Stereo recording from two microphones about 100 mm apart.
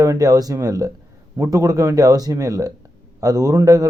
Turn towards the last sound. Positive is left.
turn(degrees=-35)  # may be behind; listen again after turning